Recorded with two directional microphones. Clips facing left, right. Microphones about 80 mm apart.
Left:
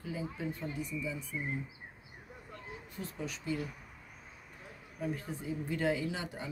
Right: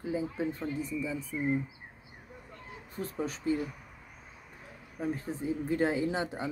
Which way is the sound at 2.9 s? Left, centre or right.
Right.